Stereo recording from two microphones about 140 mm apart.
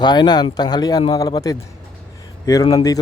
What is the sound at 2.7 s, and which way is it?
Speech, 25° left (ahead or behind).